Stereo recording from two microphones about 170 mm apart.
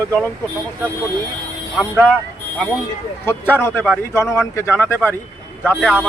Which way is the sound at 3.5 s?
10° left (ahead or behind).